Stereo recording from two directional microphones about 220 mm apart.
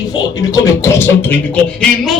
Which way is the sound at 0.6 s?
10° left (ahead or behind).